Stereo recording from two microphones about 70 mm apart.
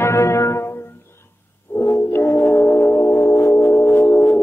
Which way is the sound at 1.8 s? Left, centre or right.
Left.